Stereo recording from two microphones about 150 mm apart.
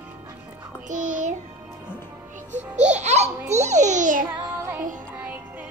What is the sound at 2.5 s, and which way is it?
A child's voice, 50° right (ahead or behind).